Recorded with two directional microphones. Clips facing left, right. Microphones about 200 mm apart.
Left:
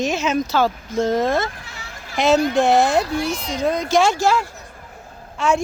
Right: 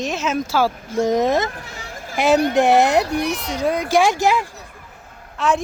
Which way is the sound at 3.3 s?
65° right (ahead or behind).